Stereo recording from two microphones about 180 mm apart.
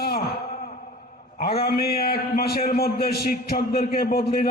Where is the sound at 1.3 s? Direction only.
60° left (ahead or behind).